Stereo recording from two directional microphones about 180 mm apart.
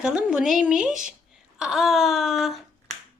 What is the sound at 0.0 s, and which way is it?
A woman's voice, 5° right (ahead or behind).